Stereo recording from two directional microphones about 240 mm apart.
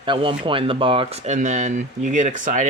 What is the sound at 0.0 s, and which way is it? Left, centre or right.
Speech, right.